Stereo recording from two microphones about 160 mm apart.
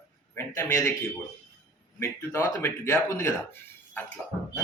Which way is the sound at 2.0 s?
15° left (ahead or behind).